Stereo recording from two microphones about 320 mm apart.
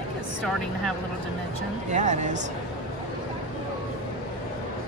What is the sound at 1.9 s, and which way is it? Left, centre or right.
Speech, right.